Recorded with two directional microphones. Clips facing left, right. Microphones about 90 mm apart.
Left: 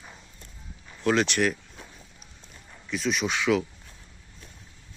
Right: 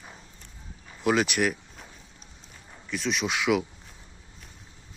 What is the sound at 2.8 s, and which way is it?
Speech, centre (ahead or behind).